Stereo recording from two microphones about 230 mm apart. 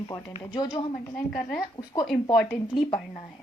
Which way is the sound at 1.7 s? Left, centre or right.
Centre.